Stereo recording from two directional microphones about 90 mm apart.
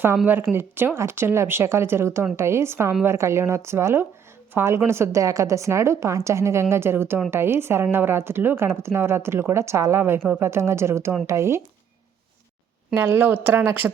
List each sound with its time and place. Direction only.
0.5 s a woman's voice: 25° right (ahead or behind)
12.9 s a woman's voice: 25° right (ahead or behind)